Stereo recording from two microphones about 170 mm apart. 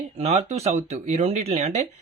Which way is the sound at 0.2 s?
40° right (ahead or behind).